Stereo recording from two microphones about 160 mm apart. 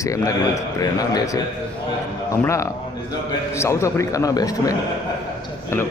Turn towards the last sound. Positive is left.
turn(degrees=15)  # may be behind; listen again after turning